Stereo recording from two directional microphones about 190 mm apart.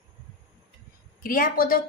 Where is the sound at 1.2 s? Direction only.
45° left (ahead or behind).